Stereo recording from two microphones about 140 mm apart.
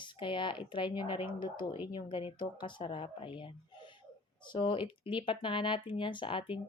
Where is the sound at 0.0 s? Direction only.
35° left (ahead or behind).